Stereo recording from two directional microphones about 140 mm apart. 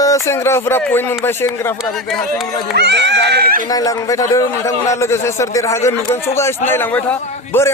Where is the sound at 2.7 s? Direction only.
90° right.